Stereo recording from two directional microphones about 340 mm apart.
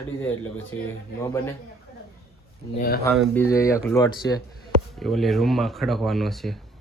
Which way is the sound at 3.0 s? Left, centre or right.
Centre.